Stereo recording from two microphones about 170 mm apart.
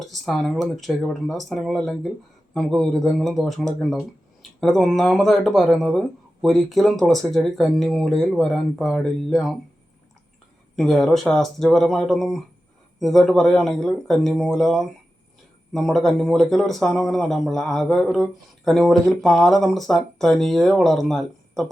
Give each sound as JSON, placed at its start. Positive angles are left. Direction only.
{"t": 0.0, "sound": "speech", "side_deg": 0}
{"t": 10.8, "sound": "speech", "side_deg": 0}